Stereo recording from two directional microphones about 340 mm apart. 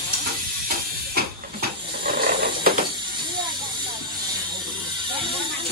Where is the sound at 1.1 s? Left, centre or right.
Right.